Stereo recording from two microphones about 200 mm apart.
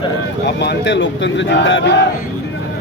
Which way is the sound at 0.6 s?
60° left (ahead or behind).